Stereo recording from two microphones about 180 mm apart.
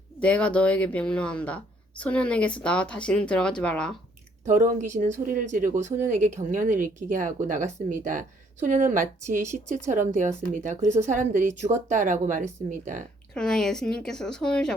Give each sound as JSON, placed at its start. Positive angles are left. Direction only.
{"t": 0.2, "sound": "speech", "side_deg": 5}
{"t": 4.4, "sound": "speech", "side_deg": -45}
{"t": 13.3, "sound": "speech", "side_deg": 5}